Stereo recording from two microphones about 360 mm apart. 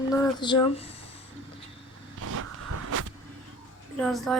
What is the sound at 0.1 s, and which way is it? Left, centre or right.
Speech, centre.